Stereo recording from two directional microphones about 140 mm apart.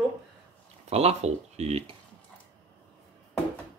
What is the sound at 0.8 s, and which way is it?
Speech, 50° right (ahead or behind).